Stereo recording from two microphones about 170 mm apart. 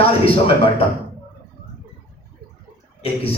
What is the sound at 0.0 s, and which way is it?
Speech, 35° left (ahead or behind).